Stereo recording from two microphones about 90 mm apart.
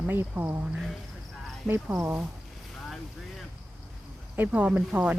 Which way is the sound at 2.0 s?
20° right (ahead or behind).